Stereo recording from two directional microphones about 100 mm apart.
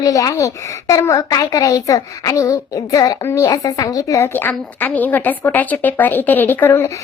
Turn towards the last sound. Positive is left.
turn(degrees=25)  # may be behind; listen again after turning